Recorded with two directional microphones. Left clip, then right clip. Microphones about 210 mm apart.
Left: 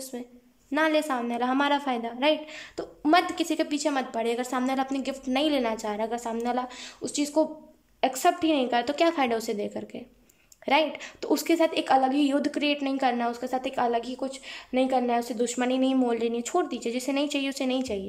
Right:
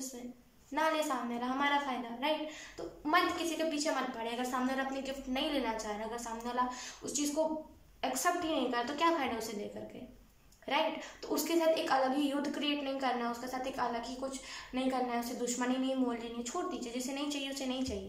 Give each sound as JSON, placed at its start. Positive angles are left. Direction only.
{"t": 0.7, "sound": "a woman's voice", "side_deg": 50}